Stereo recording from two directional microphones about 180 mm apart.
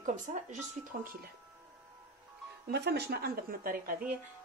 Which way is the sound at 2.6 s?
65° right (ahead or behind).